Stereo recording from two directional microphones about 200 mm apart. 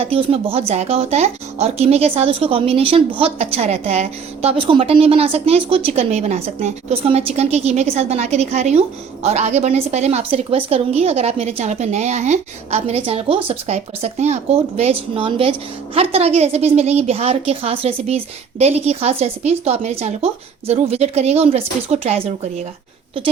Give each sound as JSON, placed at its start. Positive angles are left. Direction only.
{"t": 0.0, "sound": "a woman's voice", "side_deg": -30}